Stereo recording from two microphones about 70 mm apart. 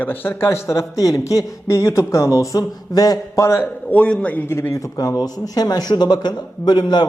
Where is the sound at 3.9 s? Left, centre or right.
Centre.